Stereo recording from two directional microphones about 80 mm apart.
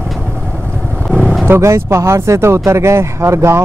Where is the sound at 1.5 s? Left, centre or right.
Right.